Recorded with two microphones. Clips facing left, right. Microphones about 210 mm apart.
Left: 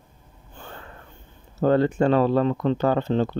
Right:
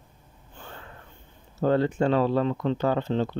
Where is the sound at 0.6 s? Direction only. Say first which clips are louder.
Left 3 dB; 55° left (ahead or behind).